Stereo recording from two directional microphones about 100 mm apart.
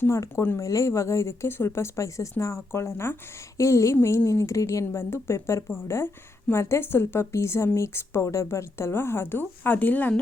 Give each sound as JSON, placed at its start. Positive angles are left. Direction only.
{"t": 0.0, "sound": "a woman's voice", "side_deg": 30}